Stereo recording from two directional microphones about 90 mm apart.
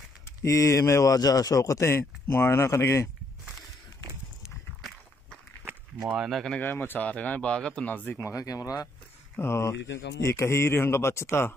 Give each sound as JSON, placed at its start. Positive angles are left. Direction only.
{"t": 0.4, "sound": "speech", "side_deg": 35}
{"t": 6.1, "sound": "speech", "side_deg": 0}
{"t": 6.6, "sound": "speech", "side_deg": 20}
{"t": 9.4, "sound": "speech", "side_deg": 30}